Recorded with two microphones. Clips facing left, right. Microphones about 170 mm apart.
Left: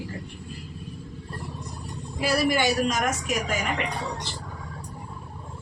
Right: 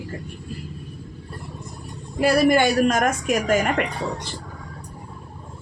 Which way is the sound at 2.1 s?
55° right (ahead or behind).